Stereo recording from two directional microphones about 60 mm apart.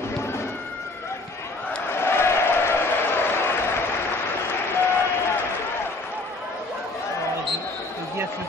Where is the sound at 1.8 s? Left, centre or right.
Left.